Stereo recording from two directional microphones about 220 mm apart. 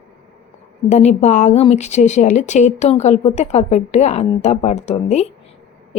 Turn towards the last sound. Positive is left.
turn(degrees=30)  # may be behind; listen again after turning